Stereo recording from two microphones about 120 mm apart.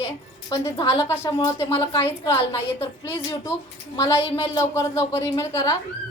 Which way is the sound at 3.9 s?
25° left (ahead or behind).